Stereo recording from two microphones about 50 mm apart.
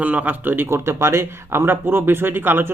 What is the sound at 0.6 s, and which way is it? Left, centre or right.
Speech, right.